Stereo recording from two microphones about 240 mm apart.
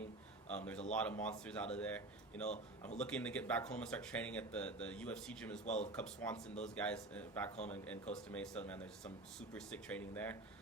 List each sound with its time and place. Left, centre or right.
0.5 s speech: centre
5.6 s speech: left
6.0 s speech: centre